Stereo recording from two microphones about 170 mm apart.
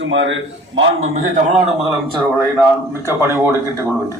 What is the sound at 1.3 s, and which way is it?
Speech, 35° right (ahead or behind).